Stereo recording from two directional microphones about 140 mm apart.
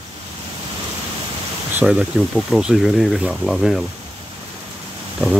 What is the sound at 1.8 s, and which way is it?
Speech, 5° right (ahead or behind).